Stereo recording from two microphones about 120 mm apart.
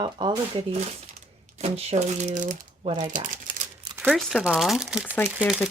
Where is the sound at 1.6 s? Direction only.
60° right (ahead or behind); by 3.5 s 90° right.